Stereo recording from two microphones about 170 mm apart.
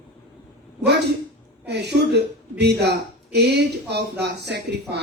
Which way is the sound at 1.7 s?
80° right.